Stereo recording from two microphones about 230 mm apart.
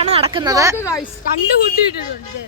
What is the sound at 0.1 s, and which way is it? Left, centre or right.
Speech, right.